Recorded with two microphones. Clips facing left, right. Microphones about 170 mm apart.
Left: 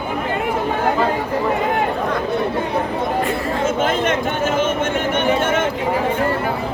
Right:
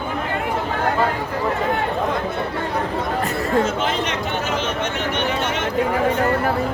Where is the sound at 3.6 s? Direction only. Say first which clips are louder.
Left 4 dB; 50° left (ahead or behind).